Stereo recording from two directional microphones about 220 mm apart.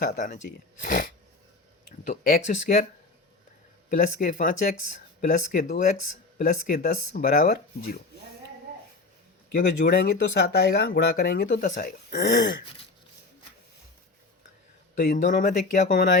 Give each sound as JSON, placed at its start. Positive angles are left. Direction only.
{"t": 0.0, "sound": "speech", "side_deg": 40}
{"t": 2.0, "sound": "speech", "side_deg": 40}
{"t": 3.8, "sound": "speech", "side_deg": 40}
{"t": 9.6, "sound": "speech", "side_deg": 45}
{"t": 14.9, "sound": "speech", "side_deg": 35}